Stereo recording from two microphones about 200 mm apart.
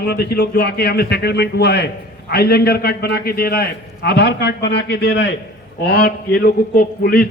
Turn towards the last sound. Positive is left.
turn(degrees=50)  # may be behind; listen again after turning